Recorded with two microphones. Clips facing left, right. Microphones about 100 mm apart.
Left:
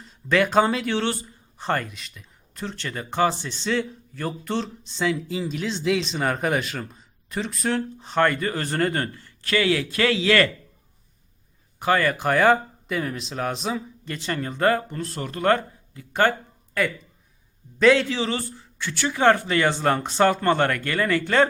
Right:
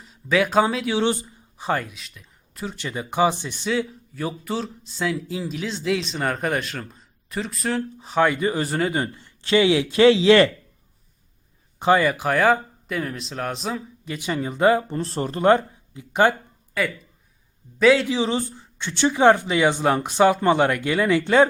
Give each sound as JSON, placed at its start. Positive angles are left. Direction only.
{"t": 0.0, "sound": "speech", "side_deg": -5}
{"t": 1.0, "sound": "a sound", "side_deg": -15}
{"t": 1.6, "sound": "speech", "side_deg": -5}
{"t": 11.8, "sound": "speech", "side_deg": -20}
{"t": 12.0, "sound": "speech", "side_deg": -5}
{"t": 14.8, "sound": "speech", "side_deg": -30}
{"t": 15.4, "sound": "speech", "side_deg": -20}
{"t": 16.8, "sound": "speech", "side_deg": 0}
{"t": 18.1, "sound": "speech", "side_deg": -15}